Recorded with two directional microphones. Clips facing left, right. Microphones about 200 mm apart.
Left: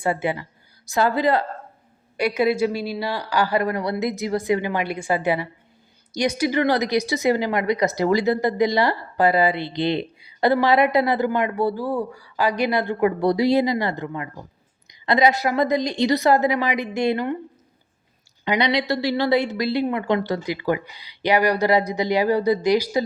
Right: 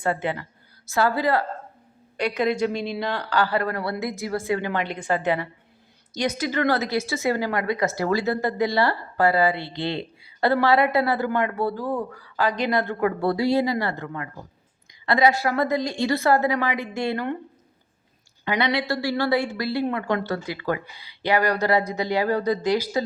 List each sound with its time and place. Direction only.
0.0 s a woman's voice: 10° left (ahead or behind)
2.1 s a woman's voice: 10° left (ahead or behind)
18.4 s a woman's voice: 20° left (ahead or behind)